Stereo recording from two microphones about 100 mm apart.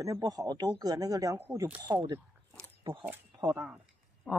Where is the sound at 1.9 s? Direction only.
45° right (ahead or behind).